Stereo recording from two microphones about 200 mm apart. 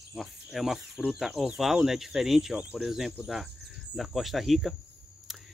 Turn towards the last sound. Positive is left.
turn(degrees=0)  # may be behind; listen again after turning